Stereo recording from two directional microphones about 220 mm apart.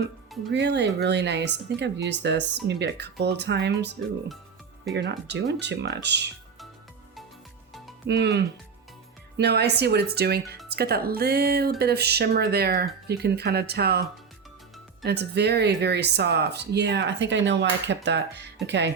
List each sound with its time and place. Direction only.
0.5 s speech: 50° right (ahead or behind)
4.9 s speech: 50° right (ahead or behind)
8.0 s speech: 50° right (ahead or behind)
15.0 s speech: 50° right (ahead or behind)